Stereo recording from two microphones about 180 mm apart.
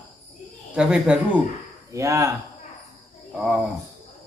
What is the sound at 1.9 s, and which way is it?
Speech, 20° right (ahead or behind).